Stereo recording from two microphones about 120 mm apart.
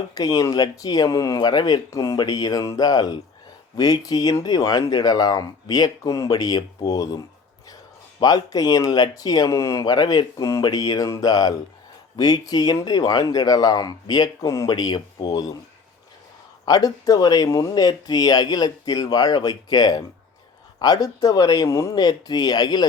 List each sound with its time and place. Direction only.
0.1 s speech: 35° left (ahead or behind)
8.2 s speech: 30° left (ahead or behind)
14.7 s speech: 35° left (ahead or behind)
16.6 s speech: 30° left (ahead or behind)